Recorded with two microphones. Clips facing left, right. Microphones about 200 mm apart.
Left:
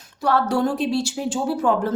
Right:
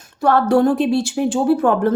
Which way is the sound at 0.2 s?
55° right (ahead or behind).